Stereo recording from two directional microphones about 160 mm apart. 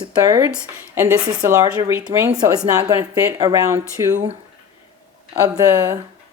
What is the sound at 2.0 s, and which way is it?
Speech, 5° right (ahead or behind).